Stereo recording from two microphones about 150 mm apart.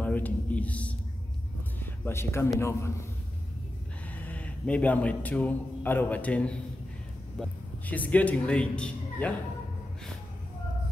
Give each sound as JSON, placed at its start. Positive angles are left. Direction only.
{"t": 0.0, "sound": "a man's voice", "side_deg": 10}
{"t": 4.1, "sound": "a man's voice", "side_deg": 10}